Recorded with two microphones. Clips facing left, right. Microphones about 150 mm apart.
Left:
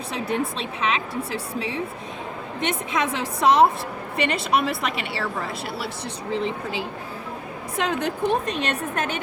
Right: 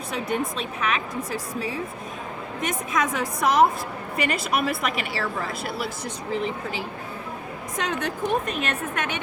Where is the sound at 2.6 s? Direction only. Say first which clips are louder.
Left 1 dB; 25° left (ahead or behind).